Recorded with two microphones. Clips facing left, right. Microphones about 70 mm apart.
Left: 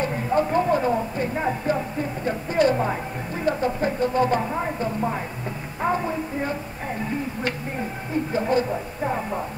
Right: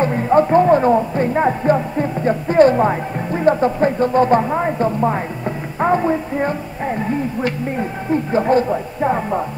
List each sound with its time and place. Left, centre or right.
0.0 s speech: right
8.3 s speech: right